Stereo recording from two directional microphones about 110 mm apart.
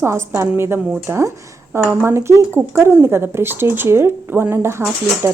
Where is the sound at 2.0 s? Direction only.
25° right (ahead or behind).